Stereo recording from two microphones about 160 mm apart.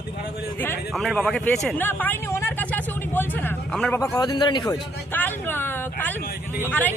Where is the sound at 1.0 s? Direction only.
5° left (ahead or behind).